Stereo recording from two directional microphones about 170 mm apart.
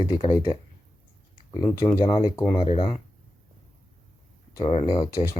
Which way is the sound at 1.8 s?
25° left (ahead or behind).